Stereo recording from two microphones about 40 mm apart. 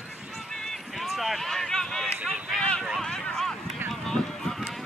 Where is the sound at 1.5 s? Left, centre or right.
Centre.